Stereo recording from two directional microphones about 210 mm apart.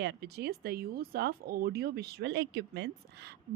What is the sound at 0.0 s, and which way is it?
A woman's voice, 55° right (ahead or behind).